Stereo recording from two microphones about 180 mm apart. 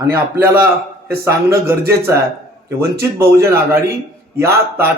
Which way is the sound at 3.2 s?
15° right (ahead or behind).